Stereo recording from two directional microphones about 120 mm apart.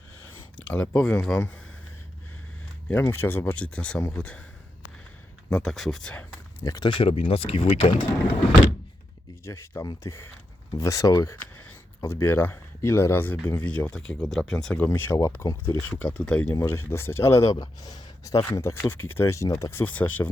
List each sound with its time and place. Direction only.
1.0 s speech: 5° left (ahead or behind)
2.9 s speech: 20° left (ahead or behind)
5.5 s speech: 5° left (ahead or behind)
6.7 s speech: 30° left (ahead or behind)
6.9 s speech: 50° left (ahead or behind)
9.4 s speech: 25° left (ahead or behind); by 14.8 s 5° left (ahead or behind)
14.8 s speech: 15° left (ahead or behind)
16.5 s speech: 20° left (ahead or behind)
19.8 s speech: 15° left (ahead or behind)